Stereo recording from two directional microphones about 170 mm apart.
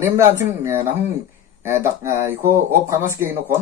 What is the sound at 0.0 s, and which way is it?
Speech, 15° right (ahead or behind).